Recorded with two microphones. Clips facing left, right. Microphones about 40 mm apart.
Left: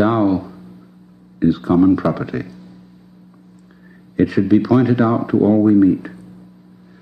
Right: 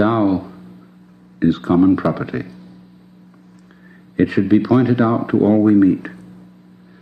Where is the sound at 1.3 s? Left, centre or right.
Right.